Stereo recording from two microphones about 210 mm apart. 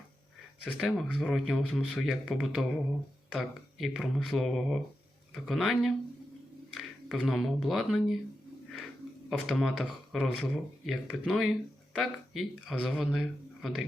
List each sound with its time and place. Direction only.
0.6 s speech: 5° left (ahead or behind)
9.5 s speech: centre (ahead or behind)